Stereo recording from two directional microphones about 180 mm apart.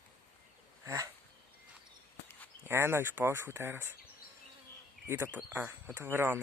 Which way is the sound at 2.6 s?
15° right (ahead or behind).